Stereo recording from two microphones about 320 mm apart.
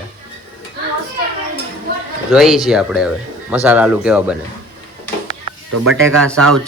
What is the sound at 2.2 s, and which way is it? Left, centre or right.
Speech, centre.